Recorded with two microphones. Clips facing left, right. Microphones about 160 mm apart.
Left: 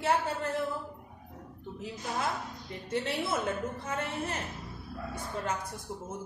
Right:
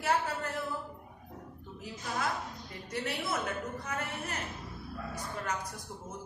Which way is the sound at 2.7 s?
25° left (ahead or behind).